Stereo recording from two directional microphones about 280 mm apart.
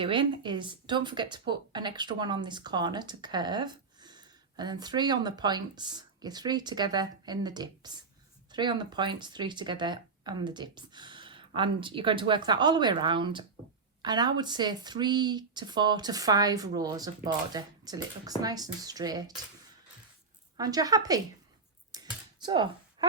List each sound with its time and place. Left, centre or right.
0.0 s speech: centre
20.6 s speech: centre
21.9 s a sound: centre